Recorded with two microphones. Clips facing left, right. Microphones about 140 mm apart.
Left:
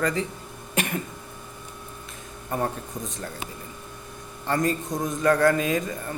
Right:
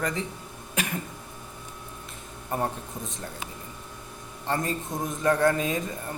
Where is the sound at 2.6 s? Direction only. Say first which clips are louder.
Left 2 dB; 25° right (ahead or behind).